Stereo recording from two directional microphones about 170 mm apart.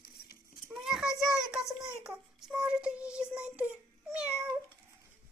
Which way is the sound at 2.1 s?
5° right (ahead or behind).